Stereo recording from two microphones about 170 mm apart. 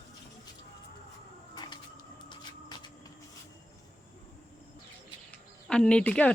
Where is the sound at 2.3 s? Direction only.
25° left (ahead or behind).